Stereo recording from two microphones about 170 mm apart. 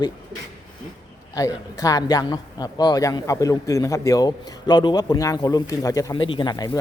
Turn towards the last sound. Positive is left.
turn(degrees=25)  # may be behind; listen again after turning